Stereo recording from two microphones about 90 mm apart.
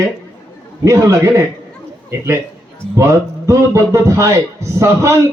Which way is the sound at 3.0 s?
35° right (ahead or behind).